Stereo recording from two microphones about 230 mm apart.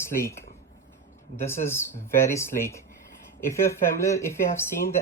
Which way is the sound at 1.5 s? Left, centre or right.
Centre.